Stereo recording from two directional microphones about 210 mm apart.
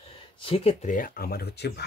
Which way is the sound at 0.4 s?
30° left (ahead or behind).